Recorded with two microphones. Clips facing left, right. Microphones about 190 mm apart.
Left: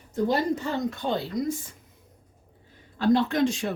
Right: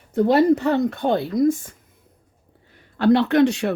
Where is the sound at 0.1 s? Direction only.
65° right (ahead or behind); by 1.7 s 50° right (ahead or behind).